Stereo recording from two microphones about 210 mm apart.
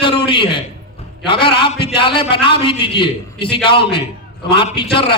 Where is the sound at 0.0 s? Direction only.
25° left (ahead or behind).